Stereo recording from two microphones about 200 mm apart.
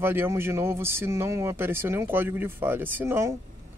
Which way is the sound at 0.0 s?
10° right (ahead or behind).